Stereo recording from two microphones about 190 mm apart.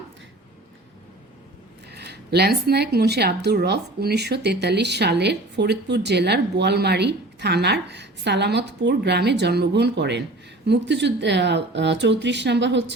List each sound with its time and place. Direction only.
1.9 s speech: 60° right (ahead or behind)